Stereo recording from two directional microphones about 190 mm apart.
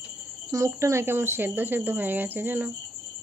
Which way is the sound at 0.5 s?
15° right (ahead or behind).